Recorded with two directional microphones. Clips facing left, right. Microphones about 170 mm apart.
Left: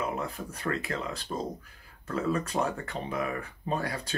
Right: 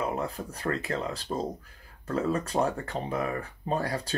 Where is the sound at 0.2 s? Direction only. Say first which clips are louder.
Right 2 dB; 35° right (ahead or behind).